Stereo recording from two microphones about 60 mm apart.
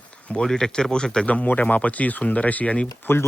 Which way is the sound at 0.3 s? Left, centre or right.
Centre.